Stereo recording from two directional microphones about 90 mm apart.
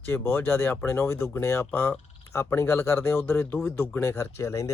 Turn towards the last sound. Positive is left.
turn(degrees=35)  # may be behind; listen again after turning